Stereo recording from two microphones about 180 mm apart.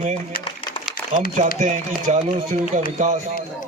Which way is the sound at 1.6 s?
40° right (ahead or behind).